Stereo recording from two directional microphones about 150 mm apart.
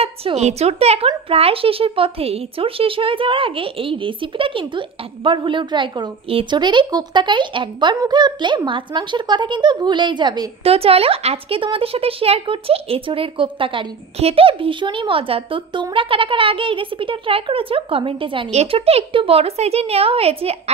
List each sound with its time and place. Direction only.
0.0 s speech: 40° right (ahead or behind)
10.6 s speech: 40° right (ahead or behind)